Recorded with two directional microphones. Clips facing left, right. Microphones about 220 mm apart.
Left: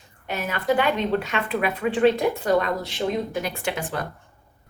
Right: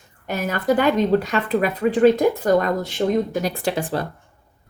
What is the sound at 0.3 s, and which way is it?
Speech, 45° right (ahead or behind).